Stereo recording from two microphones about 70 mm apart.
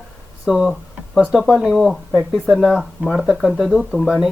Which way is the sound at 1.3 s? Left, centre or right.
Centre.